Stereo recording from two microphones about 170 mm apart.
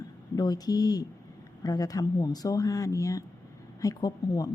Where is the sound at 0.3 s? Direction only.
20° left (ahead or behind).